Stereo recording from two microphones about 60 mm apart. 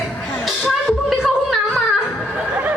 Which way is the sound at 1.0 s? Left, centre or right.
Centre.